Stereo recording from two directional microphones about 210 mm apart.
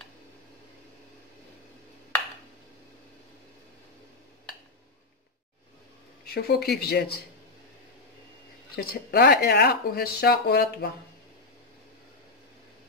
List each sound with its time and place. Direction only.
6.2 s speech: 50° left (ahead or behind)
8.7 s speech: 45° left (ahead or behind)